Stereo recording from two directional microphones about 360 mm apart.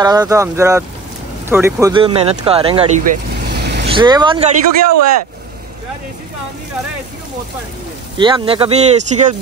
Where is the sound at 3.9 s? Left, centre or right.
Centre.